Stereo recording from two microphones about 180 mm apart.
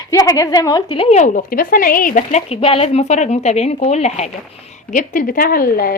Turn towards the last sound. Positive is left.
turn(degrees=55)  # may be behind; listen again after turning